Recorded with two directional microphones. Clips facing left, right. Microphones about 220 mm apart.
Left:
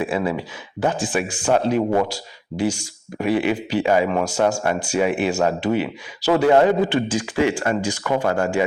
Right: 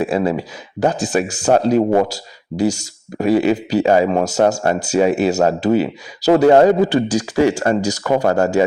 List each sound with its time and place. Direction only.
0.0 s speech: 40° right (ahead or behind)